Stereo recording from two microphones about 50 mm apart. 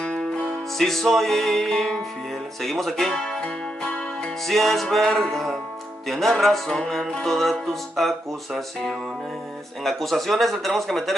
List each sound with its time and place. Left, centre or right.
0.0 s music: left
0.7 s music: centre
4.5 s music: centre